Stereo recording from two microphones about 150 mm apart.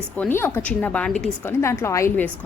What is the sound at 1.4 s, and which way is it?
Speech, 15° left (ahead or behind).